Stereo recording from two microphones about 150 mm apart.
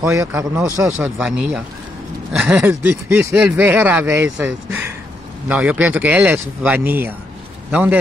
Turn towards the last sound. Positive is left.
turn(degrees=-10)  # may be behind; listen again after turning